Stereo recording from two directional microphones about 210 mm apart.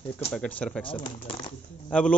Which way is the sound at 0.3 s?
5° left (ahead or behind).